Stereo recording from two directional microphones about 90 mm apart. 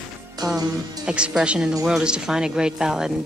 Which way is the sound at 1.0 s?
10° right (ahead or behind).